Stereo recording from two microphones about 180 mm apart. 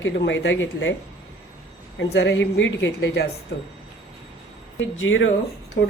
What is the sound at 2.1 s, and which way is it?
A woman's voice, 75° left (ahead or behind).